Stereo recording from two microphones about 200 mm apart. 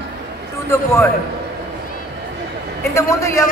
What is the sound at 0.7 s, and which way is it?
Speech, 10° left (ahead or behind).